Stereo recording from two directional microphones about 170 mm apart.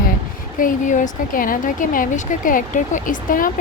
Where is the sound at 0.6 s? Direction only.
50° left (ahead or behind).